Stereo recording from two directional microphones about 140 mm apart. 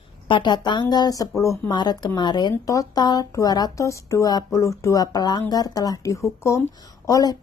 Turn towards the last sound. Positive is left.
turn(degrees=25)  # may be behind; listen again after turning